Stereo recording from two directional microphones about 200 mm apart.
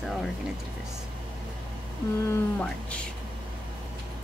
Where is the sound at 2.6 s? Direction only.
5° left (ahead or behind).